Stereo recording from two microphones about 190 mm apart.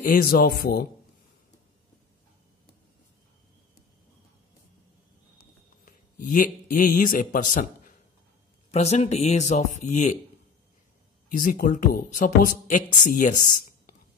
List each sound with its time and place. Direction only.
0.0 s speech: 50° left (ahead or behind)
5.9 s a man's voice: 45° left (ahead or behind)
11.2 s speech: 45° left (ahead or behind)